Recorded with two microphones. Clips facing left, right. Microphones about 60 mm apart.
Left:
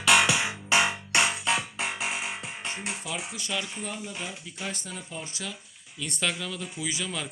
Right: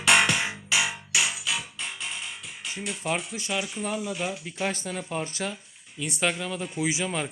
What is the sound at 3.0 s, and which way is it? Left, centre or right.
Speech, right.